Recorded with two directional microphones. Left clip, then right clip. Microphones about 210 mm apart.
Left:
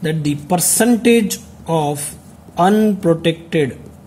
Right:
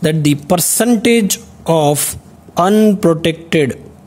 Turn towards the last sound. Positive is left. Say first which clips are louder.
# right 3 dB
turn(degrees=-50)  # may be behind; listen again after turning